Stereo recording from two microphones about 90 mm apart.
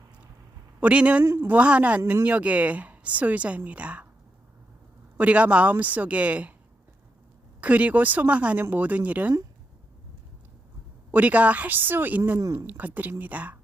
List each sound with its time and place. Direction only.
0.8 s a woman's voice: 15° right (ahead or behind)
1.2 s a woman's voice: 30° right (ahead or behind)
5.1 s a woman's voice: 15° right (ahead or behind)
7.6 s a woman's voice: 15° right (ahead or behind)
11.1 s speech: 15° right (ahead or behind)